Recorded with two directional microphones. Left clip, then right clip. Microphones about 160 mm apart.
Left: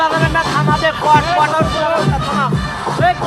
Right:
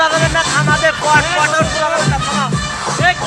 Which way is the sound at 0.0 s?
5° left (ahead or behind).